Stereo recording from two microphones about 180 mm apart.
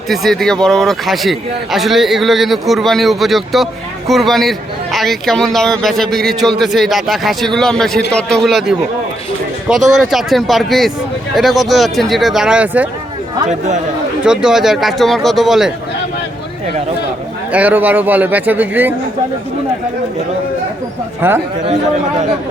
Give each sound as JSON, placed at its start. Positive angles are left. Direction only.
{"t": 0.1, "sound": "a man's voice", "side_deg": 0}
{"t": 13.5, "sound": "speech", "side_deg": -40}
{"t": 14.2, "sound": "a man's voice", "side_deg": -5}
{"t": 17.5, "sound": "a man's voice", "side_deg": -10}
{"t": 21.2, "sound": "a man's voice", "side_deg": -10}